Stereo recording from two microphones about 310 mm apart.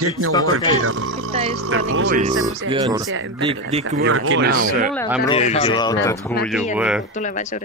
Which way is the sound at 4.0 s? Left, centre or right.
Right.